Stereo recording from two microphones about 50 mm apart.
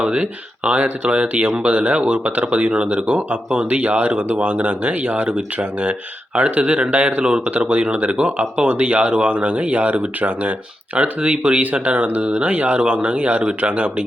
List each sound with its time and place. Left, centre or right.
0.0 s speech: right